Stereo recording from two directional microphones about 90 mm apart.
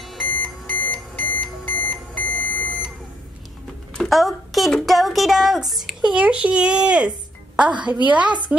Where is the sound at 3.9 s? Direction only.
Centre (ahead or behind).